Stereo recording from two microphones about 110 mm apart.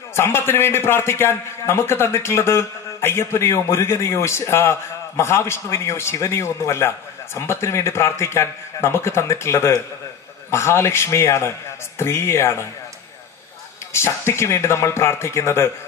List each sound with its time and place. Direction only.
0.1 s a man's voice: 20° left (ahead or behind)
13.9 s a man's voice: 25° left (ahead or behind)